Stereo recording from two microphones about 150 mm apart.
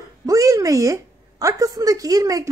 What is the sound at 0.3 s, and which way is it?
A woman's voice, 20° right (ahead or behind).